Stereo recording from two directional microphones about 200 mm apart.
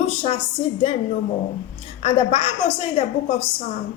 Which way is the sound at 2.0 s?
30° left (ahead or behind).